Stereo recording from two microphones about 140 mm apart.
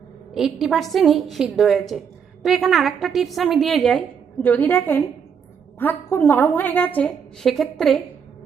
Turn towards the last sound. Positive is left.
turn(degrees=0)  # may be behind; listen again after turning